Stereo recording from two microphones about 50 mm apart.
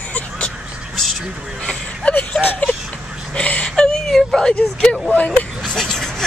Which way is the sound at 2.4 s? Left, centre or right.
Left.